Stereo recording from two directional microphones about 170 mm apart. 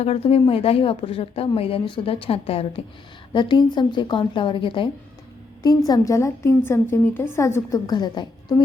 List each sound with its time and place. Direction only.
0.0 s a woman's voice: 35° left (ahead or behind)